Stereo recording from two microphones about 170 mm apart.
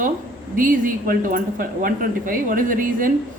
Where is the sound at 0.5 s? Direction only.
55° right (ahead or behind).